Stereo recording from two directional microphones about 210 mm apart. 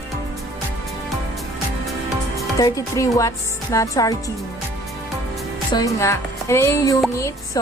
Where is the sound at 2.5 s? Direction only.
15° left (ahead or behind).